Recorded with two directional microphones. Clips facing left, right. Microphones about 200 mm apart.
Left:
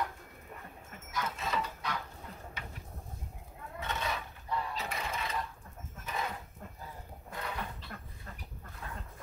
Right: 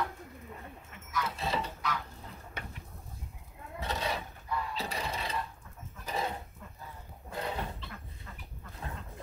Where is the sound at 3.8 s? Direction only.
35° right (ahead or behind).